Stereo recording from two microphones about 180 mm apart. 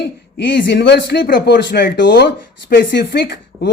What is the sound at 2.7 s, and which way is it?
Speech, 60° left (ahead or behind).